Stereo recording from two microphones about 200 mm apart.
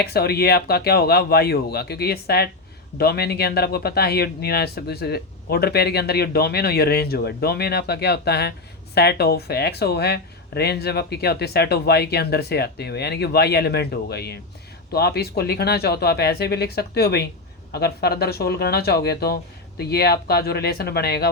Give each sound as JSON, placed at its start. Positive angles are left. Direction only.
{"t": 0.0, "sound": "speech", "side_deg": 50}